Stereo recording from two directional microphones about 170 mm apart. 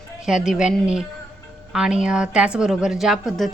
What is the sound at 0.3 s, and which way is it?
A woman's voice, 5° right (ahead or behind).